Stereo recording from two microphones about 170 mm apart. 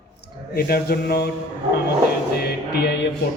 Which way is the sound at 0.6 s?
65° left (ahead or behind).